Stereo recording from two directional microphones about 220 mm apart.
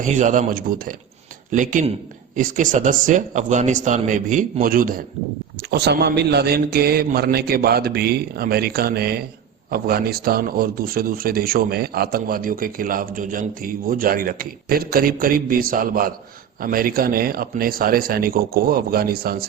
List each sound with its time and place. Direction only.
0.0 s a man's voice: 35° right (ahead or behind)